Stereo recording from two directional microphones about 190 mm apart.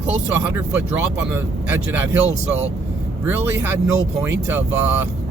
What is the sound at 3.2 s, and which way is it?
Speech, 10° right (ahead or behind).